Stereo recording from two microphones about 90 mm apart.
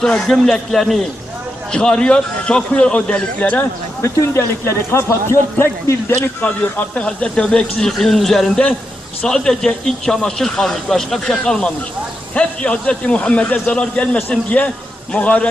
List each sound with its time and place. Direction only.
0.0 s a man's voice: 5° left (ahead or behind)
4.0 s a man's voice: 30° left (ahead or behind)
6.4 s speech: 15° left (ahead or behind)